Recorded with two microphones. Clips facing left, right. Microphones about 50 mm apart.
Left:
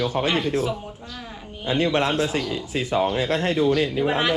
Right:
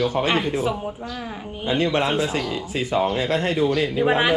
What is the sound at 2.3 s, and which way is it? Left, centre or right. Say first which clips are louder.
Speech: right 1 dB; right.